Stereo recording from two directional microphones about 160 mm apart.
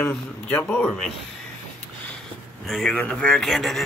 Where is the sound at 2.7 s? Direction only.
5° left (ahead or behind).